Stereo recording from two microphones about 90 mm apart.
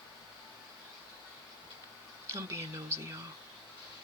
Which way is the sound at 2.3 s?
30° right (ahead or behind).